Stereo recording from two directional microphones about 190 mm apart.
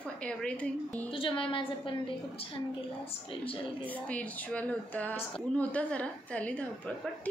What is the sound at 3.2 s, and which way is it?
Speech, 30° left (ahead or behind).